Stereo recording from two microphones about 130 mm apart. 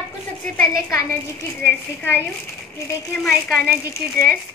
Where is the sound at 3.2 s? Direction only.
Centre (ahead or behind).